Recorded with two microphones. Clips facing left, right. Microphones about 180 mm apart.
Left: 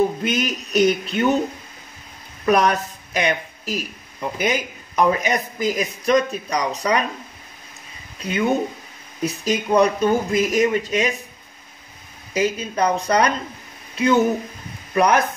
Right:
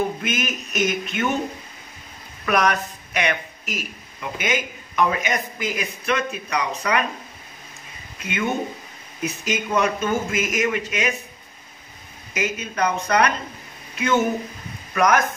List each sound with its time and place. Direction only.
0.2 s speech: 35° left (ahead or behind)
2.4 s speech: 35° left (ahead or behind)
8.2 s speech: 35° left (ahead or behind)
12.4 s speech: 30° left (ahead or behind)